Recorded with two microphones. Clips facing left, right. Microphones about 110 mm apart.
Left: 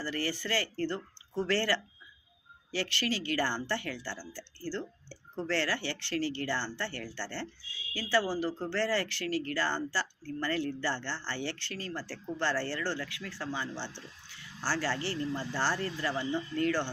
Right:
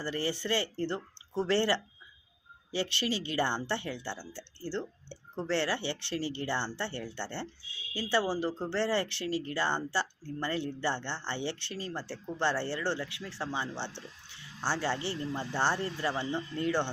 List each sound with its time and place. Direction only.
0.0 s a woman's voice: 20° right (ahead or behind)